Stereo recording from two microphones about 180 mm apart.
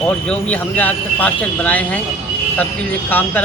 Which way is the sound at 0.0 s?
10° left (ahead or behind).